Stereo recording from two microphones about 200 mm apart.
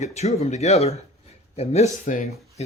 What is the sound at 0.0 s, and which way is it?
Speech, 35° left (ahead or behind).